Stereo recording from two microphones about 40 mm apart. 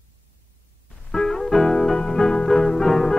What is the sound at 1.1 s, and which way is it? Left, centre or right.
Music, centre.